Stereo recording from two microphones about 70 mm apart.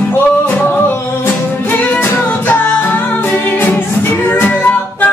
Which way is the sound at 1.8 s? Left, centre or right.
Left.